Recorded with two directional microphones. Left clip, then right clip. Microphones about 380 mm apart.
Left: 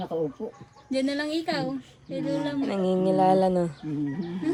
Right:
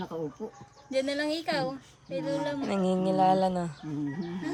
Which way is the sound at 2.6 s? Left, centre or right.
Centre.